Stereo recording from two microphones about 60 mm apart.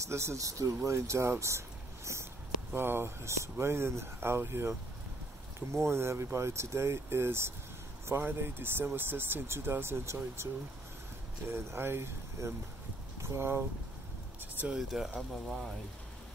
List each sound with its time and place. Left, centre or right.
0.0 s speech: right
2.7 s speech: right
14.8 s speech: centre